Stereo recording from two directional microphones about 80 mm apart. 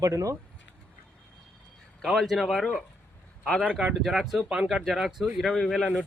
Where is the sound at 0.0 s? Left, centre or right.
Right.